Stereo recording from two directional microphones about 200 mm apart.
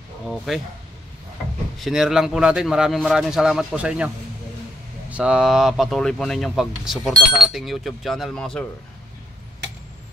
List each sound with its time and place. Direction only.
0.5 s speech: centre (ahead or behind)
1.8 s speech: centre (ahead or behind)
5.1 s speech: 5° right (ahead or behind)